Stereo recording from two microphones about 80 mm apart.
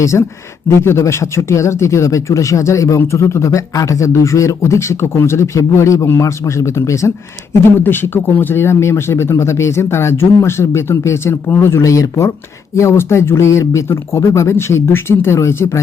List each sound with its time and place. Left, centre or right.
0.0 s speech: left
7.9 s speech: left